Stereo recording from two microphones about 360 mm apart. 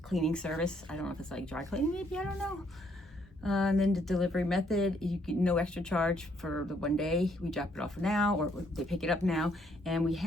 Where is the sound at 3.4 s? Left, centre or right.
Centre.